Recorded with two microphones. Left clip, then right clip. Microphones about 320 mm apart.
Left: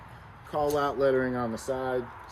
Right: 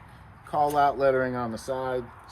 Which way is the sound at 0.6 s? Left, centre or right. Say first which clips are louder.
Right 3 dB; centre.